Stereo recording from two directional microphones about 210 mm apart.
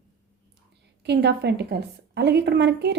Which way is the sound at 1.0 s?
55° right (ahead or behind).